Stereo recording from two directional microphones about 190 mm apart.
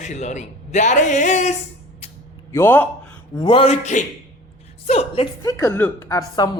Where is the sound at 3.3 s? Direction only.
25° left (ahead or behind).